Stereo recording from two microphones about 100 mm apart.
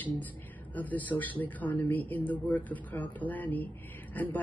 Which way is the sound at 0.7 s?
15° left (ahead or behind).